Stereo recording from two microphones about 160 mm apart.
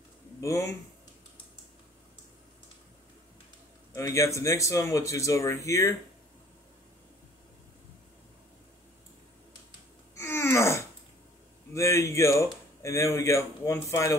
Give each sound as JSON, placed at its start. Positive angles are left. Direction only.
{"t": 0.4, "sound": "speech", "side_deg": 20}
{"t": 3.9, "sound": "speech", "side_deg": 20}
{"t": 10.1, "sound": "wail", "side_deg": 15}
{"t": 11.7, "sound": "speech", "side_deg": 20}